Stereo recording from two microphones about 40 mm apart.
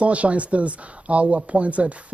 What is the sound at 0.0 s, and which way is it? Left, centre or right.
Speech, right.